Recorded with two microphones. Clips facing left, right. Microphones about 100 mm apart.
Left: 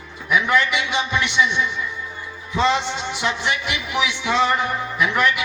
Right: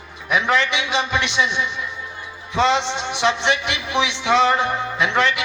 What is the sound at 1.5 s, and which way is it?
Speech, 20° right (ahead or behind).